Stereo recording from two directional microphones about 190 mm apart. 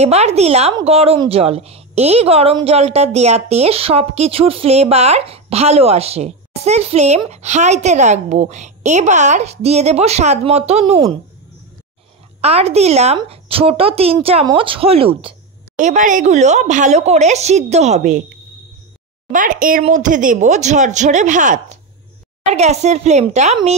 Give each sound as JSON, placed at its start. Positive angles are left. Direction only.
{"t": 0.0, "sound": "a woman's voice", "side_deg": -35}
{"t": 12.4, "sound": "a woman's voice", "side_deg": -35}
{"t": 15.8, "sound": "a woman's voice", "side_deg": -40}
{"t": 19.3, "sound": "a woman's voice", "side_deg": -45}